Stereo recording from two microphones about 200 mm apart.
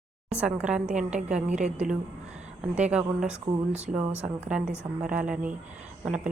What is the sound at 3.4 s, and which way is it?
Speech, 30° right (ahead or behind).